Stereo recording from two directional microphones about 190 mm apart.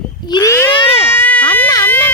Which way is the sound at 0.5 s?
10° left (ahead or behind).